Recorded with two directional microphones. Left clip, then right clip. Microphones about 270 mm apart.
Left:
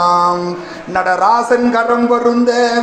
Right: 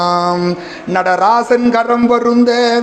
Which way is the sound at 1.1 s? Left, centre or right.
Right.